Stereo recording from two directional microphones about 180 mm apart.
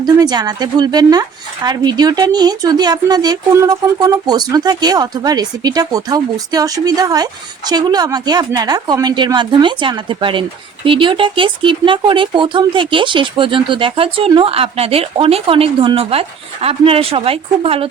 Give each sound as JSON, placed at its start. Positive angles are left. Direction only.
{"t": 0.0, "sound": "speech", "side_deg": -20}